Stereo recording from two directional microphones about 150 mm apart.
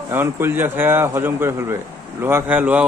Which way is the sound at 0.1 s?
15° right (ahead or behind).